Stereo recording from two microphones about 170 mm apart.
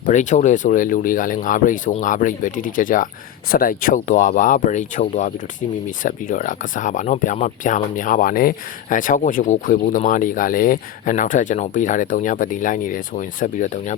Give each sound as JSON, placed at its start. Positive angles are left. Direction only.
{"t": 0.0, "sound": "speech", "side_deg": 45}